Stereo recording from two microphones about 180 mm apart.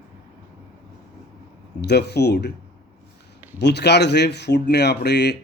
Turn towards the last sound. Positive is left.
turn(degrees=70)  # may be behind; listen again after turning